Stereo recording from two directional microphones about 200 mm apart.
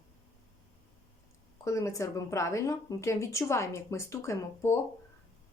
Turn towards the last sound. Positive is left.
turn(degrees=15)  # may be behind; listen again after turning